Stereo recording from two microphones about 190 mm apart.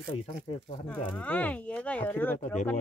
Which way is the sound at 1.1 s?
10° left (ahead or behind).